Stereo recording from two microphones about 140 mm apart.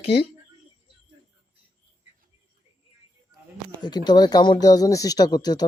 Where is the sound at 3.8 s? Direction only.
30° left (ahead or behind).